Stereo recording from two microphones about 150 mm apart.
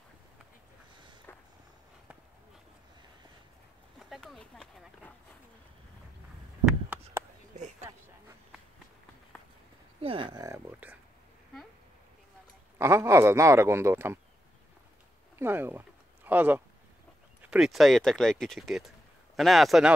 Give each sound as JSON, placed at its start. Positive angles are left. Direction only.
{"t": 4.0, "sound": "a sound", "side_deg": 0}
{"t": 10.0, "sound": "speech", "side_deg": -35}
{"t": 12.7, "sound": "speech", "side_deg": -15}
{"t": 15.3, "sound": "speech", "side_deg": -15}